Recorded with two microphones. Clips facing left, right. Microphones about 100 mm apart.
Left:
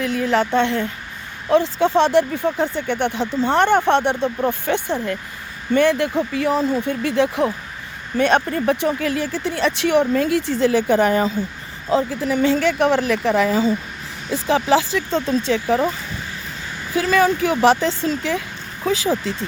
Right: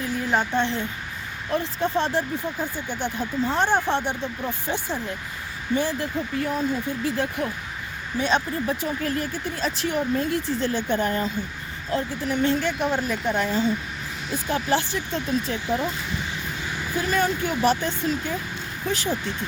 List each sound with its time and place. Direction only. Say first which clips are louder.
0.0 s speech: left 5 dB; 85° left; by 0.9 s 65° left (ahead or behind)
1.5 s speech: left 9 dB; 90° left
8.2 s speech: left 7 dB; 60° left (ahead or behind); by 11.3 s 90° left
12.4 s speech: left 6 dB; 90° left
16.9 s speech: left 7 dB; 90° left